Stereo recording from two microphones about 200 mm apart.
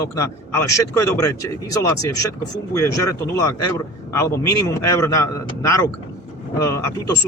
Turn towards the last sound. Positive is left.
turn(degrees=15)  # may be behind; listen again after turning